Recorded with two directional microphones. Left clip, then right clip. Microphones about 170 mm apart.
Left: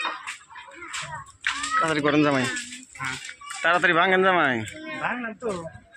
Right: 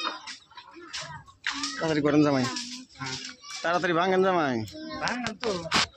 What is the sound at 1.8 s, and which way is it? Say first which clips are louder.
Speech: even; 20° right (ahead or behind).